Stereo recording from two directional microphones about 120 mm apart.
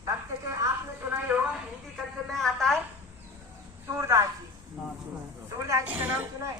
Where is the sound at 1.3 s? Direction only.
20° right (ahead or behind).